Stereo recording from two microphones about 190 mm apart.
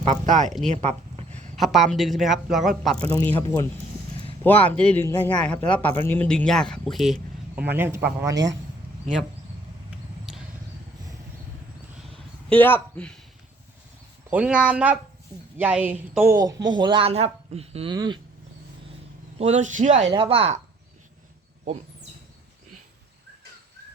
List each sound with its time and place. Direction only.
0.0 s speech: 40° right (ahead or behind)
0.7 s a sound: 35° right (ahead or behind)
1.5 s speech: centre (ahead or behind)
3.2 s a man's voice: 15° left (ahead or behind); by 8.4 s 15° right (ahead or behind)
12.5 s a man's voice: 10° left (ahead or behind)
14.3 s speech: 5° right (ahead or behind); by 17.9 s 30° right (ahead or behind)
17.9 s speech: 20° right (ahead or behind)
19.4 s speech: 35° right (ahead or behind)
20.1 s speech: 30° right (ahead or behind)